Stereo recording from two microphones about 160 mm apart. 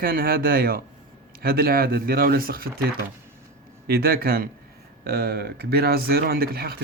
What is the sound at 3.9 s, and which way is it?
Speech, 70° right (ahead or behind).